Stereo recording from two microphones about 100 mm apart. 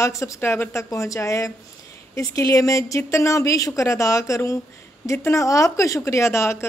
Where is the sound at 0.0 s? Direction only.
30° left (ahead or behind).